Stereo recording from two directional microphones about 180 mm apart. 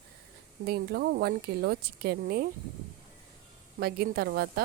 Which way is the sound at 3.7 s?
60° right (ahead or behind).